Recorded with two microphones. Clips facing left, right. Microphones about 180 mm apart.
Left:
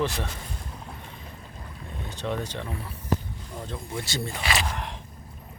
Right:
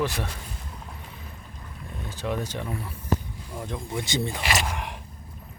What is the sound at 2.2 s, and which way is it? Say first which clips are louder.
Speech: right 1 dB; 5° right (ahead or behind).